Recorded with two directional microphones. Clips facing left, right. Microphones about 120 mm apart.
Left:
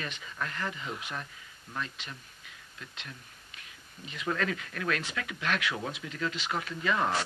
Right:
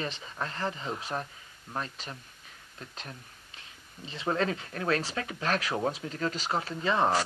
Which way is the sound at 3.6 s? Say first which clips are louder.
Right 2 dB; 30° right (ahead or behind).